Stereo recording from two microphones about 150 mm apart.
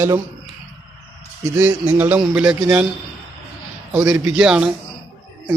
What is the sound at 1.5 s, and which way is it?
A man's voice, 15° right (ahead or behind).